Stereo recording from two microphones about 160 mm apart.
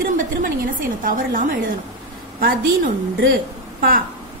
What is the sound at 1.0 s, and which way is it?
Speech, 60° right (ahead or behind).